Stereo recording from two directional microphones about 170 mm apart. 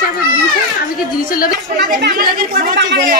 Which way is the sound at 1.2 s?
60° left (ahead or behind).